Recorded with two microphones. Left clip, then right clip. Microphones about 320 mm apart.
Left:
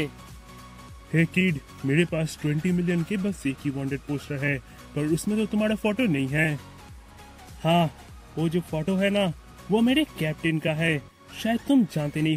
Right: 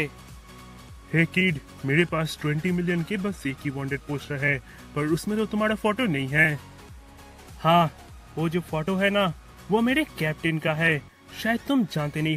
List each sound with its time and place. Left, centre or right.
1.1 s speech: centre
7.6 s speech: centre